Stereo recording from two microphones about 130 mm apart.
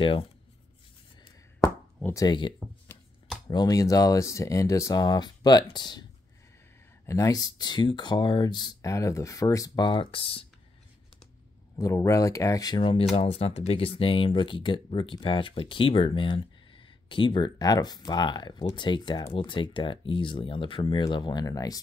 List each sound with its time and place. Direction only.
0.0 s speech: 45° left (ahead or behind)
2.2 s speech: 40° left (ahead or behind)
7.1 s speech: 25° left (ahead or behind); by 10.4 s 45° left (ahead or behind)
11.7 s speech: 25° left (ahead or behind)
13.1 s speech: 50° left (ahead or behind); by 21.8 s 25° left (ahead or behind)